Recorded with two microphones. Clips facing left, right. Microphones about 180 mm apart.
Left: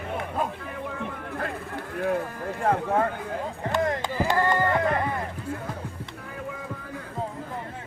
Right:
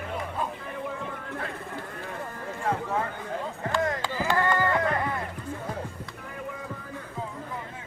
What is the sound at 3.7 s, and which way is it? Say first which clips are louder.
Chop: left 2 dB; 20° left (ahead or behind).